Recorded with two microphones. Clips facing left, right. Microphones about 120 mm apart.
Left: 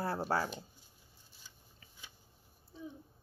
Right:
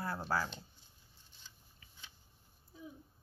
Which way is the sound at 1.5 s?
10° left (ahead or behind).